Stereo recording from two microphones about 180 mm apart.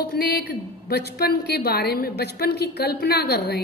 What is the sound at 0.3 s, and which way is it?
A woman's voice, 60° left (ahead or behind).